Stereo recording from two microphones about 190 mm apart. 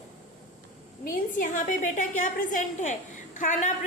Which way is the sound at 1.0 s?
45° left (ahead or behind).